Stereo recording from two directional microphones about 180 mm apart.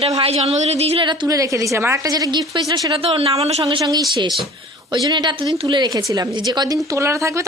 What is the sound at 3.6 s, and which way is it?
A woman's voice, 20° right (ahead or behind).